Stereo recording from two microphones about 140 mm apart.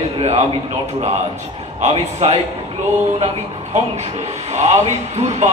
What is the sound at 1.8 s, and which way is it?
Speech, 50° right (ahead or behind).